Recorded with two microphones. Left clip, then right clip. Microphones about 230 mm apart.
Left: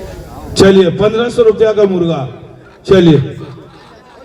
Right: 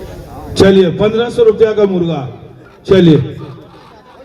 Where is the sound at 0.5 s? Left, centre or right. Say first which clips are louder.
Left 1 dB; left.